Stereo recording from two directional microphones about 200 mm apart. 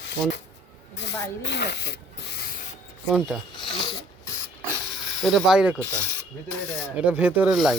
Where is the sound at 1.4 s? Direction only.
60° left (ahead or behind).